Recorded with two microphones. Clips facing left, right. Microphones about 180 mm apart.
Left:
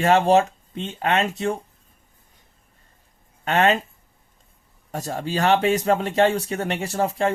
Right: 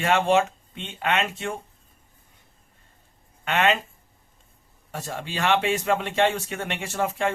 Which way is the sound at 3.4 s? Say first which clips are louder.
Left 3 dB; 40° left (ahead or behind).